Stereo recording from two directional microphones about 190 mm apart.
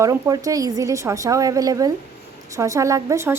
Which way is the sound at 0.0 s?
15° right (ahead or behind).